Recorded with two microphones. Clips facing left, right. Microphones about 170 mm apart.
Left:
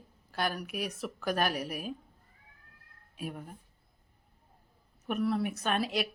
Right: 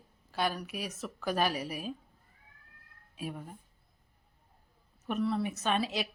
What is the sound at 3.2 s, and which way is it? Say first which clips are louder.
Speech: even; centre (ahead or behind).